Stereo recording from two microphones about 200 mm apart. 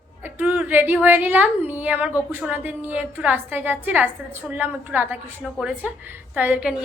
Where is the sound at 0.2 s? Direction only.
10° right (ahead or behind).